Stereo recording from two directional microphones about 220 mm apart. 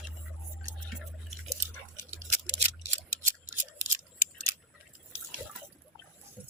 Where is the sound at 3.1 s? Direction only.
35° right (ahead or behind).